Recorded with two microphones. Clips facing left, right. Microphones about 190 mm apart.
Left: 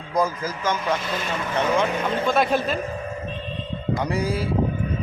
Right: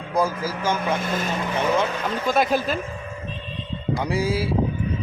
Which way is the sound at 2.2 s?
Centre (ahead or behind).